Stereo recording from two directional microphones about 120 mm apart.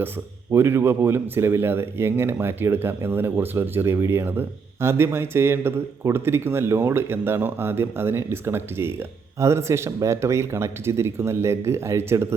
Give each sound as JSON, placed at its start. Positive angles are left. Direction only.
{"t": 0.5, "sound": "speech", "side_deg": -20}